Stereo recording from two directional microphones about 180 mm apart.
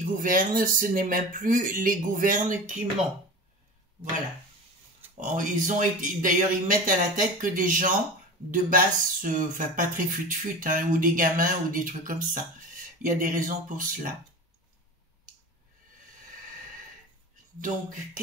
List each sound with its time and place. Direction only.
0.0 s speech: 50° right (ahead or behind)
5.1 s speech: 45° right (ahead or behind)